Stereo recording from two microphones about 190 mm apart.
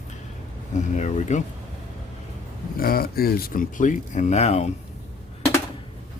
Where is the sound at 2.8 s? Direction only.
50° left (ahead or behind); by 4.7 s 35° left (ahead or behind).